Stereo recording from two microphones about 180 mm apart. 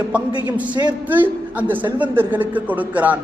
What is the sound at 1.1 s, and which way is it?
A woman's voice, 10° right (ahead or behind).